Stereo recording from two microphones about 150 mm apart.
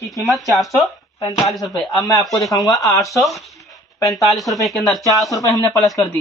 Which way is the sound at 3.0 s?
Centre (ahead or behind).